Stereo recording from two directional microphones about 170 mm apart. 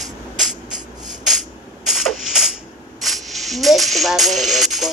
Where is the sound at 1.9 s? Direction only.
Centre (ahead or behind).